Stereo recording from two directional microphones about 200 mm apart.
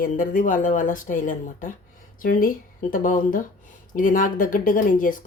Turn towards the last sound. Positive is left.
turn(degrees=45)  # may be behind; listen again after turning